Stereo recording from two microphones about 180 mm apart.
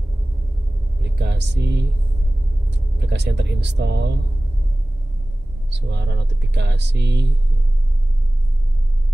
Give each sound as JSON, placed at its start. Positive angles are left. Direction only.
{"t": 1.1, "sound": "speech", "side_deg": -70}
{"t": 3.1, "sound": "speech", "side_deg": -70}
{"t": 5.7, "sound": "speech", "side_deg": -75}